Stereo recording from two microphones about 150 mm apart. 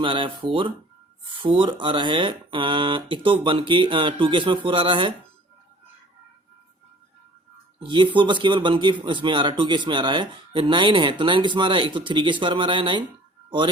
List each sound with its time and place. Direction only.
0.0 s a man's voice: 35° right (ahead or behind)
7.8 s a man's voice: 30° right (ahead or behind)